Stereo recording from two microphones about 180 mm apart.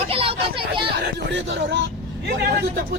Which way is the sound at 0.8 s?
65° right (ahead or behind).